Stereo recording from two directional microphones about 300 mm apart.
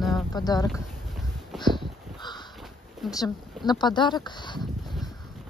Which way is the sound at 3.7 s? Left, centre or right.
Centre.